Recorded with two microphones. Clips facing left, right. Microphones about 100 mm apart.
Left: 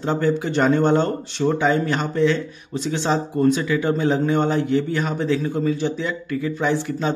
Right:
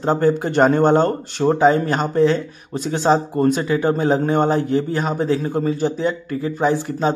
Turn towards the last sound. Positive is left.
turn(degrees=-40)  # may be behind; listen again after turning